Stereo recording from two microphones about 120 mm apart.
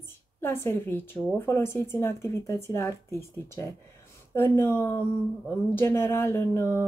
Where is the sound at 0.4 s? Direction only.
20° left (ahead or behind).